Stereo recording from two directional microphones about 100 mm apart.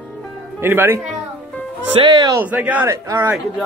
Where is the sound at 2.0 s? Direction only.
50° right (ahead or behind).